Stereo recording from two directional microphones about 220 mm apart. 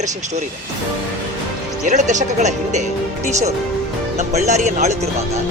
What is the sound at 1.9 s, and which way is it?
Speech, 35° right (ahead or behind).